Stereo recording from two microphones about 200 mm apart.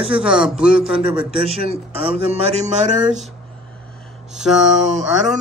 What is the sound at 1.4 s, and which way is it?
Speech, 30° right (ahead or behind).